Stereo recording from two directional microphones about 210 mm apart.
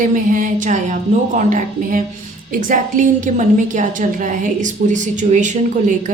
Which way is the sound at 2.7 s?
40° right (ahead or behind).